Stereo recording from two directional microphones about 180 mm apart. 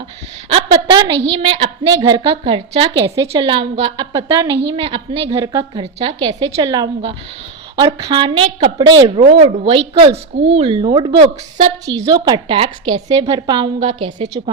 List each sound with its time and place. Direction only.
0.5 s a woman's voice: 25° right (ahead or behind)
5.4 s a woman's voice: 15° right (ahead or behind)
5.8 s a woman's voice: 35° right (ahead or behind)
12.0 s a woman's voice: 25° right (ahead or behind)